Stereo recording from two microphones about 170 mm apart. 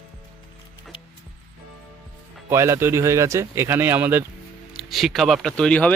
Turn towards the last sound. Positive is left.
turn(degrees=10)  # may be behind; listen again after turning